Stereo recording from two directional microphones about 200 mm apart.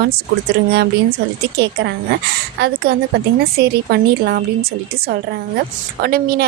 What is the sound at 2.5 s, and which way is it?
A woman's voice, 55° right (ahead or behind).